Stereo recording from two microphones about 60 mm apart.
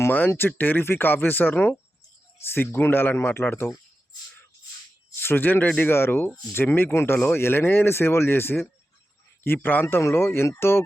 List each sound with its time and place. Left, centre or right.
0.3 s speech: left
5.2 s speech: left
5.9 s speech: left
9.8 s speech: left